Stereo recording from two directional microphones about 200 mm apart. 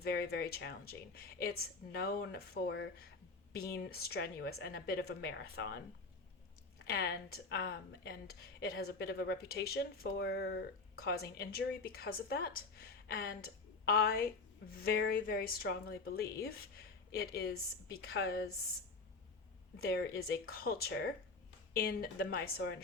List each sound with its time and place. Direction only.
0.0 s speech: 55° left (ahead or behind)
6.8 s speech: 50° left (ahead or behind)
19.8 s speech: 50° left (ahead or behind)